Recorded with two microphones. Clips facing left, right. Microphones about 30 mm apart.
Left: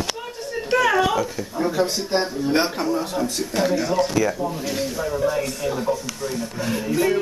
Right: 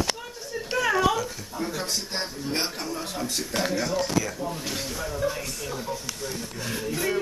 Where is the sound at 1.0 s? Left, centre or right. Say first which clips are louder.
Left 4 dB; centre.